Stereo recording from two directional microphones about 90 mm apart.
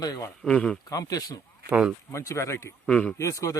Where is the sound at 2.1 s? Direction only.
30° left (ahead or behind).